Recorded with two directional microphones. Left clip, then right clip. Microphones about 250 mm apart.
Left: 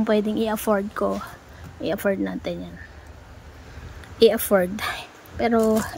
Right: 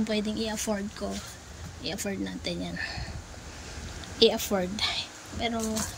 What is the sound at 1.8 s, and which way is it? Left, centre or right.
Speech, centre.